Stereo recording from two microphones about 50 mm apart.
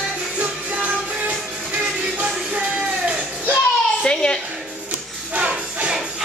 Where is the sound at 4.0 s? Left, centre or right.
Centre.